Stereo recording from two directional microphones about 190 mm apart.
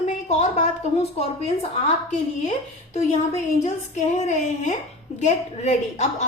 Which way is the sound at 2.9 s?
35° left (ahead or behind).